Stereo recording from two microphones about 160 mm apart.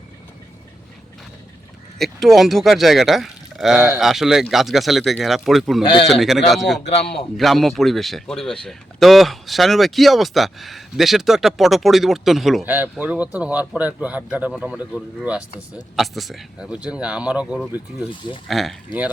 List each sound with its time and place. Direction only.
2.0 s speech: centre (ahead or behind)
5.8 s a man's voice: 30° left (ahead or behind)
6.1 s speech: centre (ahead or behind)
6.8 s a man's voice: 40° left (ahead or behind)
7.3 s speech: centre (ahead or behind)
12.6 s speech: 10° right (ahead or behind)